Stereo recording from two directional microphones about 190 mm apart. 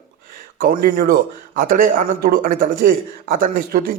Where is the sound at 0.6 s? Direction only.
50° right (ahead or behind).